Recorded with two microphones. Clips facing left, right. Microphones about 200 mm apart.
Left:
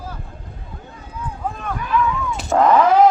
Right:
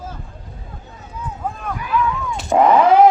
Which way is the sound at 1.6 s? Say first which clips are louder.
Even; centre (ahead or behind).